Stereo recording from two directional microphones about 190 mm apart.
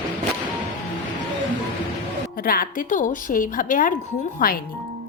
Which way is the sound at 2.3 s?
50° left (ahead or behind).